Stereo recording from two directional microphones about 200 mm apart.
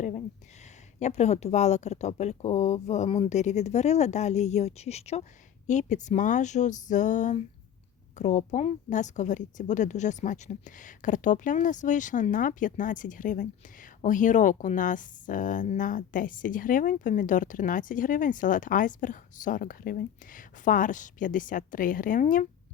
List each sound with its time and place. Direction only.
0.9 s speech: 35° left (ahead or behind)